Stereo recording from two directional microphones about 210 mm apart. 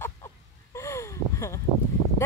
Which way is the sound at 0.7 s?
10° left (ahead or behind).